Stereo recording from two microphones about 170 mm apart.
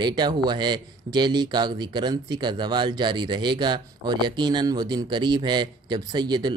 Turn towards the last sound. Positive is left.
turn(degrees=-25)  # may be behind; listen again after turning